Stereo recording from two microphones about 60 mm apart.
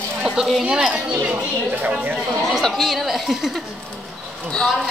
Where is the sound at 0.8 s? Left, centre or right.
Right.